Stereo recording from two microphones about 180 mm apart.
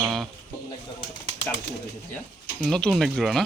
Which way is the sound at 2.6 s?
5° left (ahead or behind).